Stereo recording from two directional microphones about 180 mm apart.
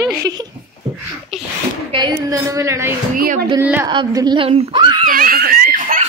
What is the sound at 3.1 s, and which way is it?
Speech, 50° right (ahead or behind).